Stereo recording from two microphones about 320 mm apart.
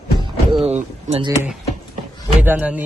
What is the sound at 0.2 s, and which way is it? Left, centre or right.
Speech, centre.